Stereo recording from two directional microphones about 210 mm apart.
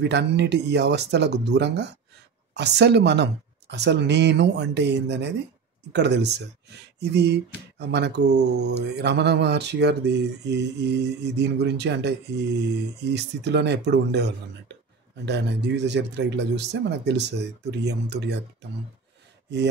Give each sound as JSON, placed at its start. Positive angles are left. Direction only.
{"t": 0.0, "sound": "speech", "side_deg": -55}